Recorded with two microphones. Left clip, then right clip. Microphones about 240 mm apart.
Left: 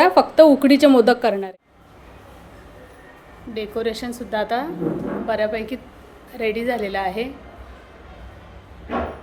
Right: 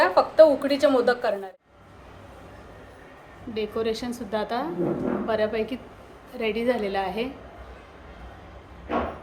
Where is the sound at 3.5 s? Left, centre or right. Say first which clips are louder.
Left 2 dB; centre.